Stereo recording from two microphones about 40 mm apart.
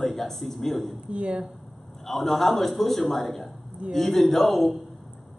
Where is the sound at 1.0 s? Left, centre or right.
Right.